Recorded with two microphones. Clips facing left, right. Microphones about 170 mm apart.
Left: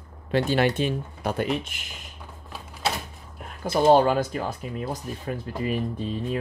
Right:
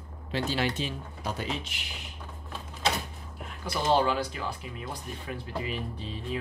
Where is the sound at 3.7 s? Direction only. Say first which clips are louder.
Left 8 dB; 50° left (ahead or behind).